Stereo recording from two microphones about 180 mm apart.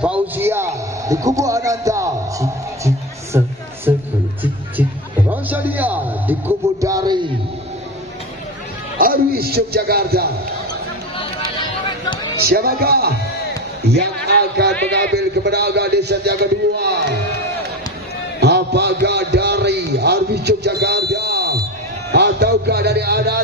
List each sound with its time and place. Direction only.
0.0 s music: 10° right (ahead or behind)
3.3 s speech: 15° right (ahead or behind)
5.3 s a sound: 10° right (ahead or behind)
8.9 s speech: 55° right (ahead or behind)
12.4 s a man's voice: 60° right (ahead or behind)
18.4 s a sound: 65° right (ahead or behind)
22.1 s music: 65° right (ahead or behind)